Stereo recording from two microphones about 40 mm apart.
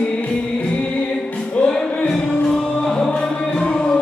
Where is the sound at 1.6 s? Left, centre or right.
Centre.